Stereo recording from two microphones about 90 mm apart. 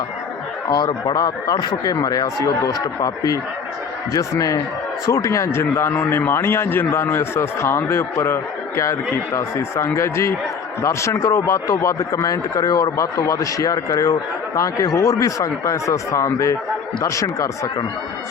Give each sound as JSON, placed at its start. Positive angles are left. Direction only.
{"t": 1.0, "sound": "a man's voice", "side_deg": 45}